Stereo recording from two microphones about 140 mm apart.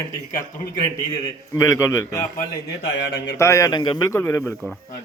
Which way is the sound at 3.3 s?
20° left (ahead or behind).